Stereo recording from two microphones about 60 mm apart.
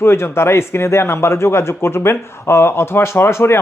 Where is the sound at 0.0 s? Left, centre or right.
Left.